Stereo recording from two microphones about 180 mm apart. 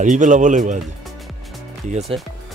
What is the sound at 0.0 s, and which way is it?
Speech, 45° right (ahead or behind).